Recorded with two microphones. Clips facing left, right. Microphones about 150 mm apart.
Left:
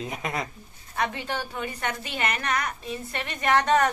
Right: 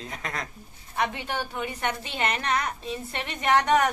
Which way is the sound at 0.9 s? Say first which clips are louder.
Even; 15° right (ahead or behind).